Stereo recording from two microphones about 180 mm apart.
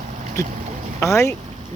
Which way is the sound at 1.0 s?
15° left (ahead or behind).